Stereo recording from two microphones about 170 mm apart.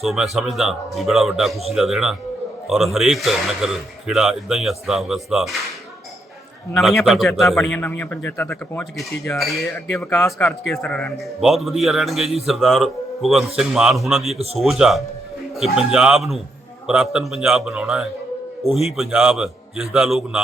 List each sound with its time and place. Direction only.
0.0 s a man's voice: centre (ahead or behind)
6.7 s a man's voice: centre (ahead or behind)
9.3 s a man's voice: centre (ahead or behind)
14.3 s speech: 35° right (ahead or behind)
14.6 s a man's voice: centre (ahead or behind)